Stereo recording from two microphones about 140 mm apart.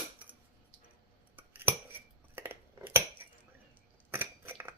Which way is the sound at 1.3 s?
15° right (ahead or behind).